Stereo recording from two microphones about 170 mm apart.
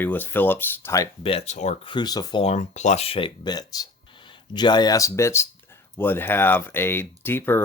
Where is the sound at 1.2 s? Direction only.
35° left (ahead or behind).